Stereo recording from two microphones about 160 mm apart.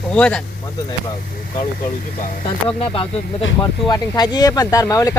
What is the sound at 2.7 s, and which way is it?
Speech, 35° left (ahead or behind).